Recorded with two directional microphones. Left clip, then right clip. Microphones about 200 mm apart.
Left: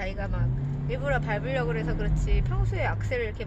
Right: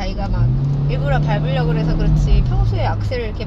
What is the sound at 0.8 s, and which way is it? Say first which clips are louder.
Speech: right 6 dB; 25° left (ahead or behind).